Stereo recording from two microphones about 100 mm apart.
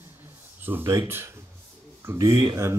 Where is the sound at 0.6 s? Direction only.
25° right (ahead or behind).